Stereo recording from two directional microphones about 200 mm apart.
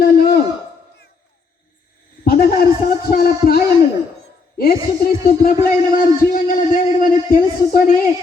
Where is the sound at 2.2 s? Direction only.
50° left (ahead or behind).